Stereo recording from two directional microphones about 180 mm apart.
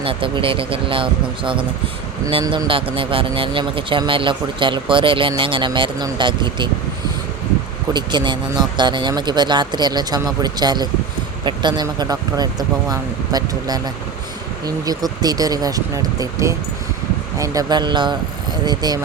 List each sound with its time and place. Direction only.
0.0 s speech: 30° right (ahead or behind)
7.9 s speech: 25° right (ahead or behind)